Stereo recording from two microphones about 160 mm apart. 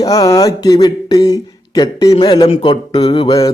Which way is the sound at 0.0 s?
20° left (ahead or behind).